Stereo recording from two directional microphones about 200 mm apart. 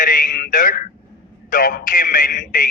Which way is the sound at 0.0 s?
45° left (ahead or behind).